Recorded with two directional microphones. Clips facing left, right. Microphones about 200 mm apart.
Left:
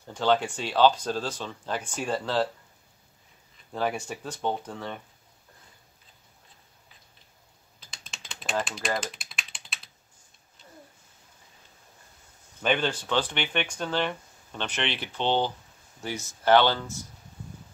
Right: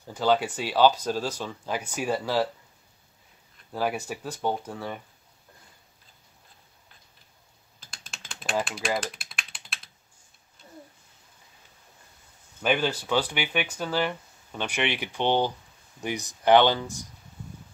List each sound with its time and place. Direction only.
0.1 s speech: 5° right (ahead or behind)
3.7 s speech: 5° right (ahead or behind)
7.9 s typing: centre (ahead or behind)
8.5 s a sound: 5° right (ahead or behind)
12.6 s speech: 5° right (ahead or behind)